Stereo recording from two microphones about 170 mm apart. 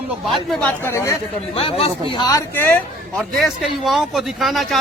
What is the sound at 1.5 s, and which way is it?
Speech, 35° left (ahead or behind).